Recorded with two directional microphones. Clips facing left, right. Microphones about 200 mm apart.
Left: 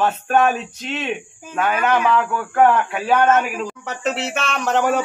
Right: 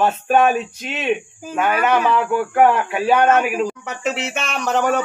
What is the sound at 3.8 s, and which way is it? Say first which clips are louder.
Speech: even; centre (ahead or behind).